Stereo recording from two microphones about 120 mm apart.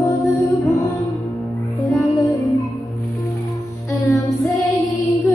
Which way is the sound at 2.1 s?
25° left (ahead or behind).